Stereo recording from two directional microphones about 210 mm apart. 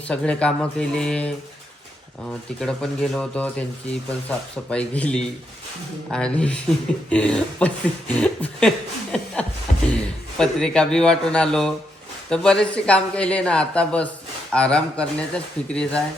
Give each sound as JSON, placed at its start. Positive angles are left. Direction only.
{"t": 0.1, "sound": "speech", "side_deg": 5}
{"t": 9.7, "sound": "a sound", "side_deg": 35}
{"t": 10.3, "sound": "speech", "side_deg": 5}